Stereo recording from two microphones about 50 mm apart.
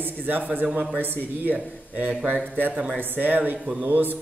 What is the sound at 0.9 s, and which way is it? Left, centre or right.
Speech, right.